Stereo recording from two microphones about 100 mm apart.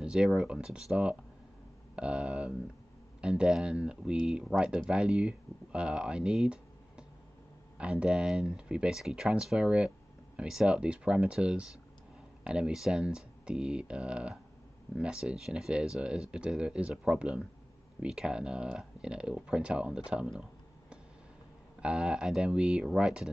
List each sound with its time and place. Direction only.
0.0 s speech: 5° right (ahead or behind)
21.8 s speech: 10° right (ahead or behind)